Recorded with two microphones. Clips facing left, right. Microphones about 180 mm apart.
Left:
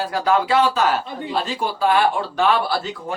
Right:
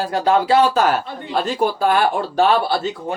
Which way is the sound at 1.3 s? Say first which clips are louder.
Right 5 dB; 50° right (ahead or behind).